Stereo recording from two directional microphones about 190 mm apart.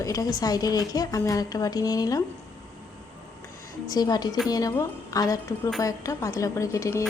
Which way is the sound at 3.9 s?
20° left (ahead or behind).